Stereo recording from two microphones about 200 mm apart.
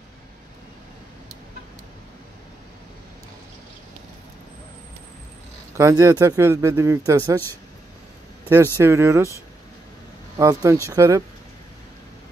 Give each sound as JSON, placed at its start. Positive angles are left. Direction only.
{"t": 5.8, "sound": "speech", "side_deg": -15}
{"t": 8.7, "sound": "speech", "side_deg": -15}
{"t": 10.3, "sound": "speech", "side_deg": -15}